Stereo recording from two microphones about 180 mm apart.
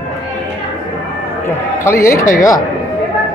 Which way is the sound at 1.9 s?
15° left (ahead or behind).